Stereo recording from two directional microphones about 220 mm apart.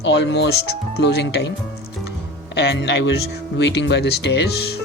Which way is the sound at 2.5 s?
50° left (ahead or behind).